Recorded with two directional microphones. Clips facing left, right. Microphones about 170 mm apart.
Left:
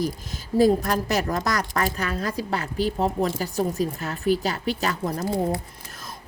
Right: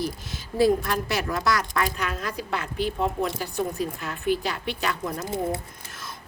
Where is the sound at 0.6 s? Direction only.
40° left (ahead or behind).